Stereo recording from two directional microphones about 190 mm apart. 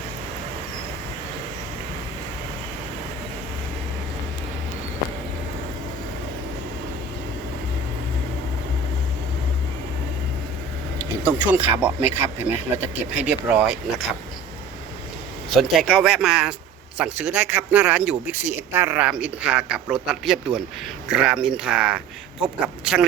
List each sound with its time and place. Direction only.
10.9 s speech: 10° right (ahead or behind)
15.5 s speech: centre (ahead or behind)